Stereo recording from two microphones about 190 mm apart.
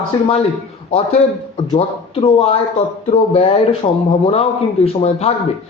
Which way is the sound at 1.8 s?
30° left (ahead or behind).